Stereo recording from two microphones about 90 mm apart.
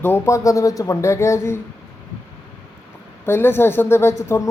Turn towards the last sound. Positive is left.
turn(degrees=35)  # may be behind; listen again after turning